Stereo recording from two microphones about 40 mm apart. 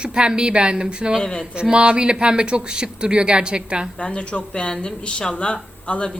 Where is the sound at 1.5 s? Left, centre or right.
Right.